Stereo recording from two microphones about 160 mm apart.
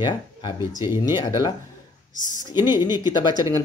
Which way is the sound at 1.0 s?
25° left (ahead or behind).